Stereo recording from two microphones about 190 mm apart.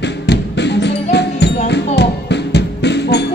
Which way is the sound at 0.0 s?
65° left (ahead or behind).